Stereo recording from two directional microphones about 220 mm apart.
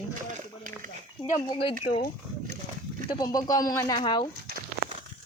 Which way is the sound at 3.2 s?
15° left (ahead or behind).